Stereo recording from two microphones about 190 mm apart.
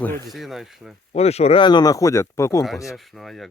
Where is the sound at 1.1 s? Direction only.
35° left (ahead or behind); by 2.7 s 15° left (ahead or behind).